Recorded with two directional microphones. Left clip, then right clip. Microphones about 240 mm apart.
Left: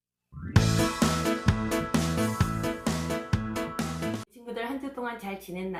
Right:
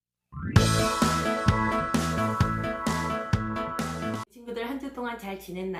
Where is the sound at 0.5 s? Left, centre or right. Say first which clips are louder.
Right 3 dB; centre.